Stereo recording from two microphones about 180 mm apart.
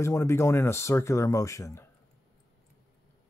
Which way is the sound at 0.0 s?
15° left (ahead or behind).